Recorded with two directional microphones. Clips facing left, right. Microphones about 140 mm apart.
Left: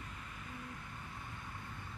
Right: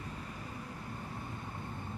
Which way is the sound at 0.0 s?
35° right (ahead or behind).